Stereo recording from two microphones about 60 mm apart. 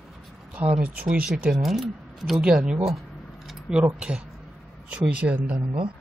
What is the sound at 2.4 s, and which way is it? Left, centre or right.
Speech, centre.